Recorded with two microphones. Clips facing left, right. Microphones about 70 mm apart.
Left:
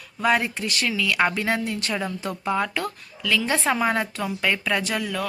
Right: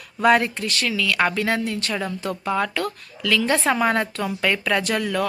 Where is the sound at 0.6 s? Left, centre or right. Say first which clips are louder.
Right 1 dB; centre.